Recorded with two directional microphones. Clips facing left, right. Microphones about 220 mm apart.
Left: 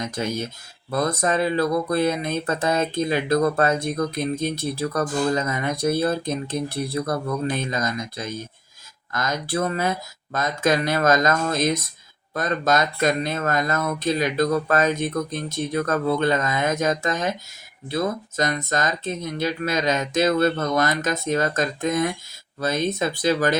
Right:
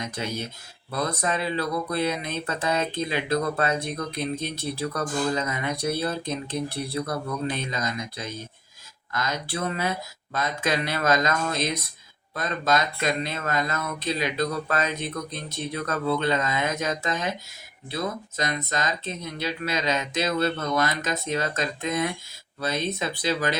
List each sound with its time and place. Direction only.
0.2 s speech: 45° left (ahead or behind)